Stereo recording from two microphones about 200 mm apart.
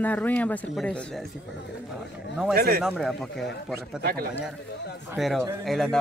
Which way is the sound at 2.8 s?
Centre (ahead or behind).